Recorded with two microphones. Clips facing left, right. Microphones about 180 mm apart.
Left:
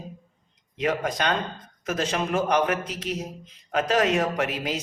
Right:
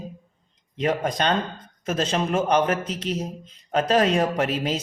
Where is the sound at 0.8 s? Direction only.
30° right (ahead or behind).